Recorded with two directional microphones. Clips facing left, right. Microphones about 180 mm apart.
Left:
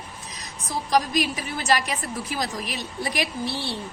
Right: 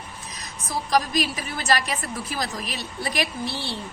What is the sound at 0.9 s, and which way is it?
A woman's voice, 15° left (ahead or behind).